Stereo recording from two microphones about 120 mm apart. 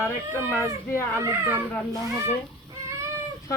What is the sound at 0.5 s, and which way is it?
Speech, 20° left (ahead or behind).